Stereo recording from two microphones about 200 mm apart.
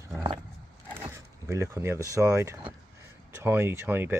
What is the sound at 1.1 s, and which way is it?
Speech, 15° right (ahead or behind).